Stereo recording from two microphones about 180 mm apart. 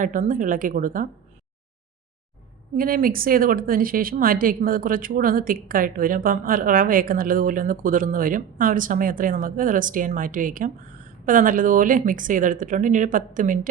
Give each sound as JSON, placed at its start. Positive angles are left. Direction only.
{"t": 0.0, "sound": "a woman's voice", "side_deg": -45}
{"t": 2.7, "sound": "a woman's voice", "side_deg": -55}